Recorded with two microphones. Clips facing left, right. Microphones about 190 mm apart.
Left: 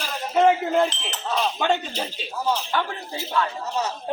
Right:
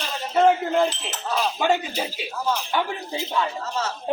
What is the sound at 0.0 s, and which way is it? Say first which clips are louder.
Speech: even; centre (ahead or behind).